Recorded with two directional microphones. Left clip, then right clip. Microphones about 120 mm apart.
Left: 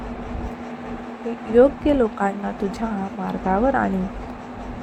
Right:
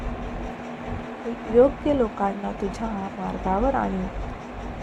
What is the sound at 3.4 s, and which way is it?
Speech, 25° left (ahead or behind).